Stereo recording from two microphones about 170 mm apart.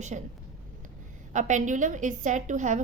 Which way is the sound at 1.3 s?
45° right (ahead or behind).